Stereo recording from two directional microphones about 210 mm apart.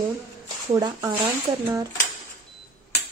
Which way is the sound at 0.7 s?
20° right (ahead or behind).